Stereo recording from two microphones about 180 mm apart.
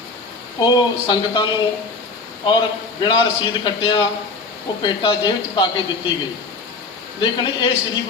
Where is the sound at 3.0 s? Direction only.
25° left (ahead or behind).